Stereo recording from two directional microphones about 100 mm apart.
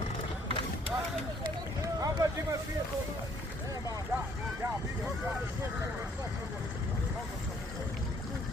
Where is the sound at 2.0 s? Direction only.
35° right (ahead or behind).